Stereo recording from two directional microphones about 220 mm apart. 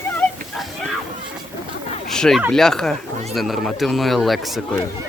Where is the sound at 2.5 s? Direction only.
Centre (ahead or behind).